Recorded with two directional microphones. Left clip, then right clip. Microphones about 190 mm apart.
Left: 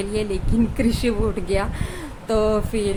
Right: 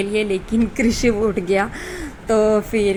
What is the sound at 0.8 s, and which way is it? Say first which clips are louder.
A woman's voice: right 7 dB; 25° right (ahead or behind).